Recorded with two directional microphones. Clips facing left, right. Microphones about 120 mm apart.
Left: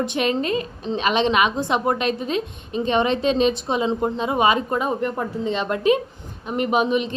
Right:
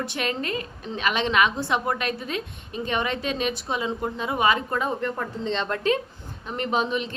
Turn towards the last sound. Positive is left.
turn(degrees=20)  # may be behind; listen again after turning